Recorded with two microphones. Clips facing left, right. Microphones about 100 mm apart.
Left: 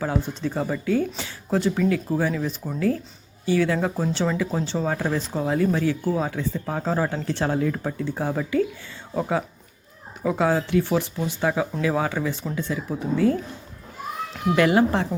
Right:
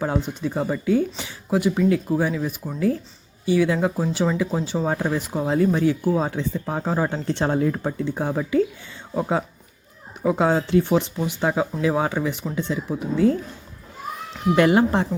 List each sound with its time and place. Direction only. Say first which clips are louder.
0.0 s speech: right 1 dB; 20° right (ahead or behind)
10.2 s speech: right 2 dB; 20° right (ahead or behind)
14.5 s speech: right 2 dB; 25° right (ahead or behind)